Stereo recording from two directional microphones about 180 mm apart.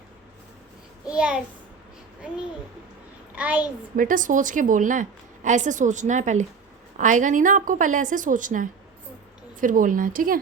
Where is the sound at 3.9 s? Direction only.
50° right (ahead or behind).